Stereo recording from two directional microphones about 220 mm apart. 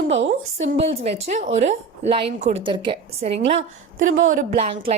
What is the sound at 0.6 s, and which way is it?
A woman's voice, 30° right (ahead or behind).